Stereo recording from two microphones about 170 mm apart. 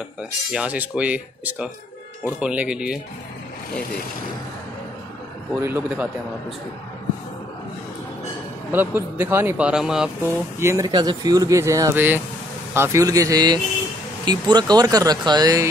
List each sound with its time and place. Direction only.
0.5 s speech: 5° right (ahead or behind)
5.6 s speech: 15° right (ahead or behind)
8.7 s speech: 15° right (ahead or behind)
10.2 s speech: 15° right (ahead or behind)